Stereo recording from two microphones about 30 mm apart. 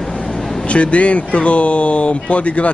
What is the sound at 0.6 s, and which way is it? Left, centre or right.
Speech, left.